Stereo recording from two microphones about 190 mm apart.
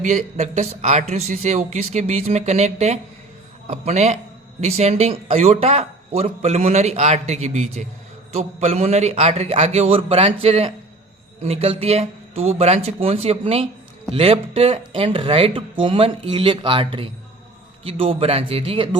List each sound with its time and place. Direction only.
0.0 s speech: 40° right (ahead or behind)